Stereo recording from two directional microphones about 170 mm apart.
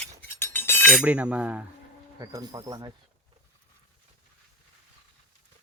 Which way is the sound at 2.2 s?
20° right (ahead or behind).